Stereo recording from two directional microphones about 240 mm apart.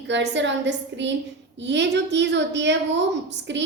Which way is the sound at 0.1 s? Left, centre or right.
Right.